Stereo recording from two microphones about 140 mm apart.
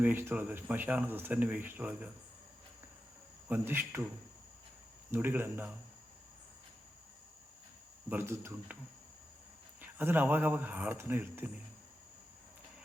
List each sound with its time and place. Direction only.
0.0 s speech: 15° right (ahead or behind)
3.5 s speech: 15° right (ahead or behind)
5.1 s speech: 15° right (ahead or behind)
8.1 s speech: 15° right (ahead or behind)
9.8 s speech: 15° right (ahead or behind)